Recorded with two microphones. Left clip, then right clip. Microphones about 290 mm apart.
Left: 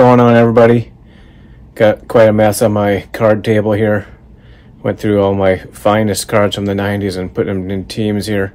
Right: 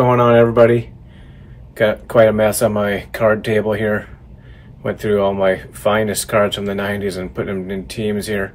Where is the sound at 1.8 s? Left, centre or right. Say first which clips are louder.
Left 4 dB; left.